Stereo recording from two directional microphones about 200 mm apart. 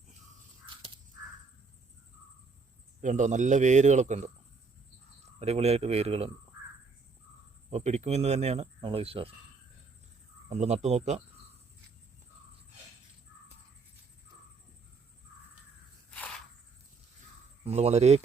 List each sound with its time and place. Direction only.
3.0 s speech: 40° right (ahead or behind)
5.4 s speech: 30° right (ahead or behind)
7.7 s speech: 35° right (ahead or behind)
10.5 s speech: 35° right (ahead or behind)
17.7 s speech: 30° right (ahead or behind)